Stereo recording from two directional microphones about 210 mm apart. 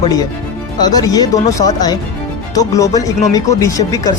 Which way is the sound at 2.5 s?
15° left (ahead or behind).